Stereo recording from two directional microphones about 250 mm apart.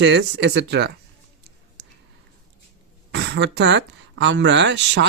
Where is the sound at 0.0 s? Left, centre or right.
Right.